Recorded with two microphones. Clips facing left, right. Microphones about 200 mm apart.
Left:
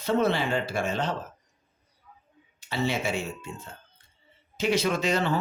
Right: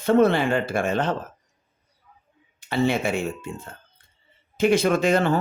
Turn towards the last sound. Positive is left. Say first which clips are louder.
# right 6 dB
turn(degrees=-50)  # may be behind; listen again after turning